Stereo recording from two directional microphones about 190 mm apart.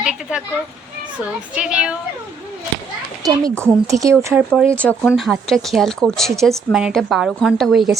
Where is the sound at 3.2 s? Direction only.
20° right (ahead or behind).